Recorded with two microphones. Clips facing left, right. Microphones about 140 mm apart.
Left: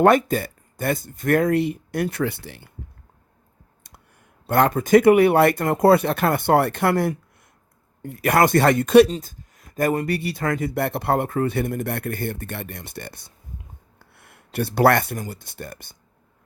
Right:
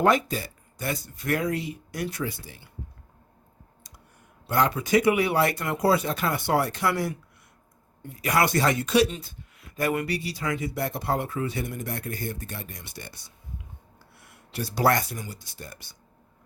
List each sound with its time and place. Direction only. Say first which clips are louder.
0.0 s speech: left 6 dB; 55° left (ahead or behind)
4.4 s speech: left 6 dB; 55° left (ahead or behind)
9.0 s speech: left 7 dB; 40° left (ahead or behind)
10.1 s speech: left 5 dB; 55° left (ahead or behind)